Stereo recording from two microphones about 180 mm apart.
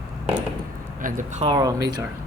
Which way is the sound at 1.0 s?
45° right (ahead or behind).